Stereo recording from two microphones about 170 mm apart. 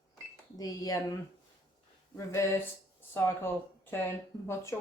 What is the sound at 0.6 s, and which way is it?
Speech, 20° left (ahead or behind).